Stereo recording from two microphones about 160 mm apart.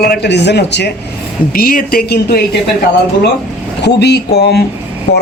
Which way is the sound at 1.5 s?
65° left (ahead or behind).